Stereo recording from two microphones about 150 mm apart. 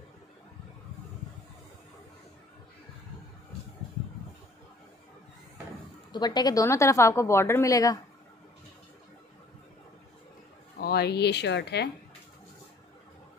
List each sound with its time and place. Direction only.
6.1 s a woman's voice: 30° left (ahead or behind)
10.8 s speech: 90° left